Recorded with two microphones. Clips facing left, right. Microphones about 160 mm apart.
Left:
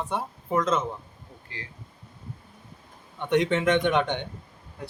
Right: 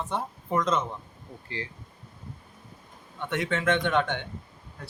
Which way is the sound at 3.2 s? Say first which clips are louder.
Left 6 dB; 20° left (ahead or behind).